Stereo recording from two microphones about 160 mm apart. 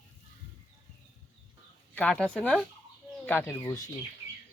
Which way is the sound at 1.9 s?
5° left (ahead or behind).